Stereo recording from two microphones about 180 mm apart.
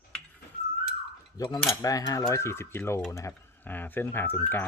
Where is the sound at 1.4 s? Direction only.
20° left (ahead or behind).